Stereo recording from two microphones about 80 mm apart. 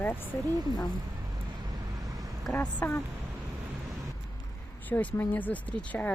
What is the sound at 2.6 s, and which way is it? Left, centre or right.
Speech, left.